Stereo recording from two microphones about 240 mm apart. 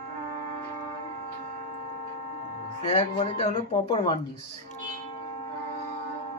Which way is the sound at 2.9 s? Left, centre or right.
Left.